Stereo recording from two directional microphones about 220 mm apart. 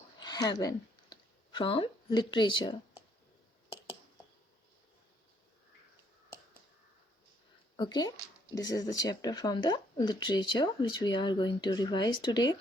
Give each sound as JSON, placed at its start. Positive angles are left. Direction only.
{"t": 0.2, "sound": "speech", "side_deg": 20}
{"t": 7.8, "sound": "speech", "side_deg": 20}